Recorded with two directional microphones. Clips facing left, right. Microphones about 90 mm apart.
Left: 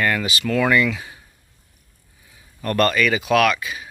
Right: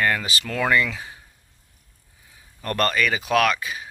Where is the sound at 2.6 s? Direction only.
30° right (ahead or behind).